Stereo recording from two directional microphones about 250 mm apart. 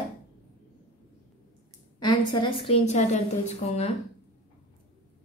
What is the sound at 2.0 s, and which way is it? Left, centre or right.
A woman's voice, centre.